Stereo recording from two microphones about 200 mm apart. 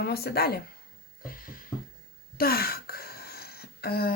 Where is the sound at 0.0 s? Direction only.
50° left (ahead or behind).